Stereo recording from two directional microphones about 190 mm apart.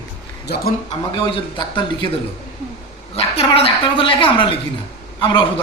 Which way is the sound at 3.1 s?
30° left (ahead or behind).